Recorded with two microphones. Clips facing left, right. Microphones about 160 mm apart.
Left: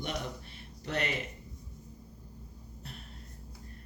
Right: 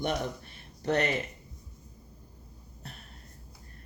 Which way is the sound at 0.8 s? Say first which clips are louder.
Right 7 dB; 45° right (ahead or behind).